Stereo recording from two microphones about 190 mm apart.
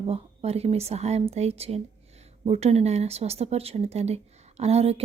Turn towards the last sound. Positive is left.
turn(degrees=-35)  # may be behind; listen again after turning